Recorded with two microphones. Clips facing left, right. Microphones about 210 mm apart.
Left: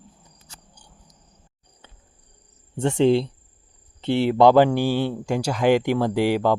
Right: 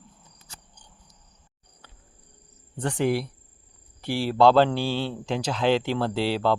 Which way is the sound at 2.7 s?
25° left (ahead or behind).